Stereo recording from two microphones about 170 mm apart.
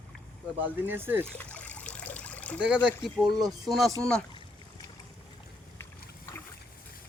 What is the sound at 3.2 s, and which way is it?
Speech, 20° right (ahead or behind).